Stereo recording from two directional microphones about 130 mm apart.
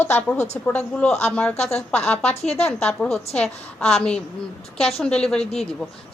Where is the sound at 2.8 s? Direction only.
5° left (ahead or behind).